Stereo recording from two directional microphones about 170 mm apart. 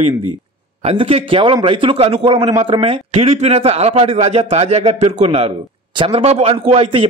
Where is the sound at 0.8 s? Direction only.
35° right (ahead or behind).